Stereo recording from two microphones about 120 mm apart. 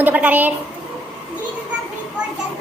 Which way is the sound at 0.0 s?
15° right (ahead or behind).